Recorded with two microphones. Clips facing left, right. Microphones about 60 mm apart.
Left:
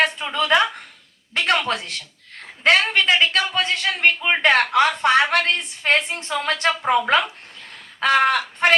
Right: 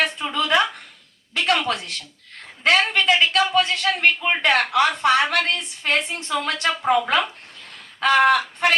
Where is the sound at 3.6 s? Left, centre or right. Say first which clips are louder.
Right 1 dB; left.